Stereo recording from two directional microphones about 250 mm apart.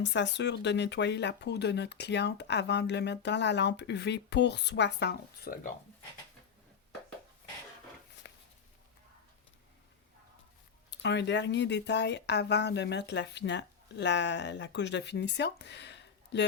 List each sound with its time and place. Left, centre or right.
0.0 s speech: left
8.2 s a sound: left
10.9 s speech: left